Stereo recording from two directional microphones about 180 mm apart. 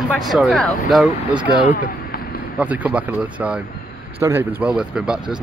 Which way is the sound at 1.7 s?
50° left (ahead or behind).